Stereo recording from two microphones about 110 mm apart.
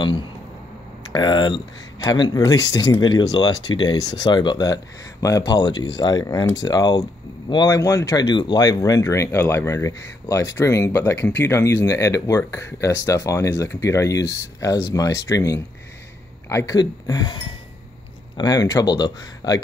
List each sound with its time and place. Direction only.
1.1 s speech: 40° left (ahead or behind)